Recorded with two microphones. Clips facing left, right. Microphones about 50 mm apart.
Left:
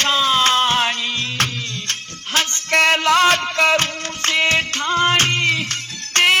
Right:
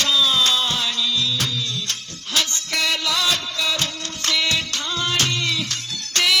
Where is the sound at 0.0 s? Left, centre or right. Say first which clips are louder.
Left 3 dB; left.